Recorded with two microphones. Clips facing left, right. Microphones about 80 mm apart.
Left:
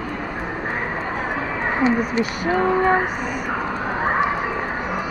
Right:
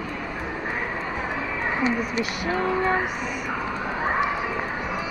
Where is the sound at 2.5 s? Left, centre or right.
Left.